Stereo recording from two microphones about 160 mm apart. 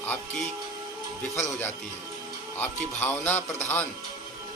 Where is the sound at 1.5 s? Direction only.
15° left (ahead or behind).